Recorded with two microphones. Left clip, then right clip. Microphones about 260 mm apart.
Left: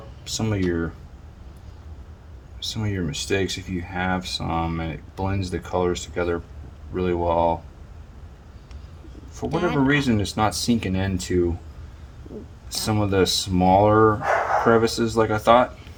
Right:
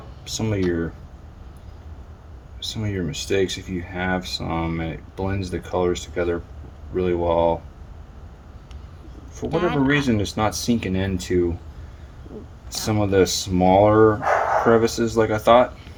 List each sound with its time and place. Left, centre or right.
0.3 s speech: left
2.7 s speech: left
9.4 s speech: centre
12.7 s speech: centre